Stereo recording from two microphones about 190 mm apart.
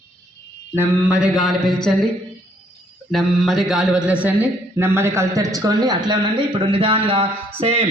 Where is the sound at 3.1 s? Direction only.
Centre (ahead or behind).